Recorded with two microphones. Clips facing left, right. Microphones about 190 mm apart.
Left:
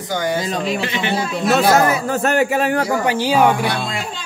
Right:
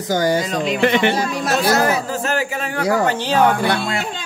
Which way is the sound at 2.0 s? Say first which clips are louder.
Left 5 dB; 65° left (ahead or behind).